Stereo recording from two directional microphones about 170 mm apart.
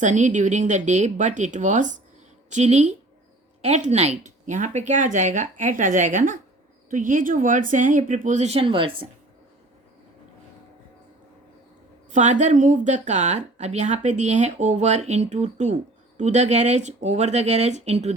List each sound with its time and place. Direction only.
0.0 s speech: 45° right (ahead or behind); by 9.0 s 30° right (ahead or behind)
12.1 s speech: 45° right (ahead or behind)